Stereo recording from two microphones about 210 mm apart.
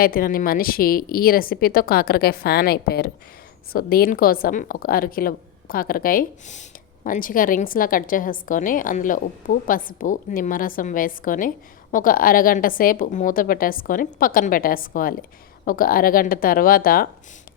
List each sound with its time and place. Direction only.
0.0 s a woman's voice: 45° left (ahead or behind)